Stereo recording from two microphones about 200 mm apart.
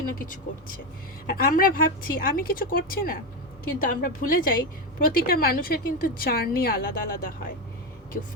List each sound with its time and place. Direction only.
1.3 s a woman's voice: 45° left (ahead or behind)